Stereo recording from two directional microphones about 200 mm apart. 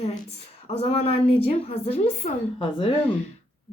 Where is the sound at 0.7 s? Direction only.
30° left (ahead or behind).